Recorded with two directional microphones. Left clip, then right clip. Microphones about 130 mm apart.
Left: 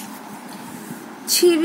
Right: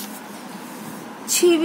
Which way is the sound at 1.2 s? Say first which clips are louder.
Left 1 dB; 50° left (ahead or behind).